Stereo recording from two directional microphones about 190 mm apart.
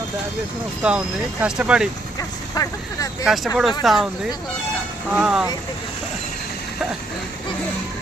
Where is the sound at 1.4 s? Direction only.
5° right (ahead or behind).